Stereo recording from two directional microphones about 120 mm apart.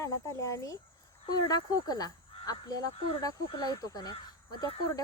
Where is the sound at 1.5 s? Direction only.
35° left (ahead or behind).